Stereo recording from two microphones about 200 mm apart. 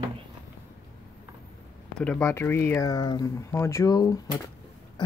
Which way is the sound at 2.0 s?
5° left (ahead or behind).